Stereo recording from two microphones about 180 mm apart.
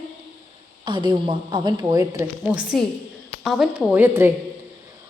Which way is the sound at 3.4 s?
Centre (ahead or behind).